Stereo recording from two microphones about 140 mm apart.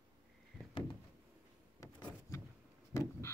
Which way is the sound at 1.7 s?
25° left (ahead or behind).